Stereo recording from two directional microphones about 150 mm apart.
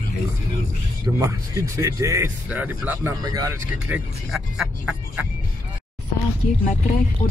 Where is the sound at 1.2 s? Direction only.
20° right (ahead or behind).